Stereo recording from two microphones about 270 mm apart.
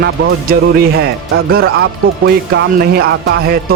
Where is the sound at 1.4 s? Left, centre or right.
Right.